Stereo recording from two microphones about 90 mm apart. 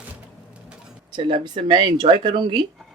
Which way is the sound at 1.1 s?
70° right (ahead or behind).